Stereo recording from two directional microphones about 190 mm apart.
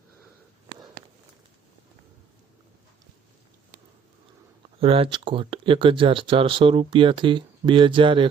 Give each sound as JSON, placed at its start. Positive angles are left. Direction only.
{"t": 4.8, "sound": "speech", "side_deg": -30}